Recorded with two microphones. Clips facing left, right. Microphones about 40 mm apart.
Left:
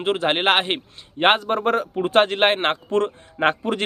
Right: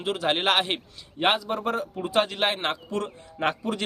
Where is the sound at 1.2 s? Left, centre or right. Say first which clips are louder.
Left 6 dB; left.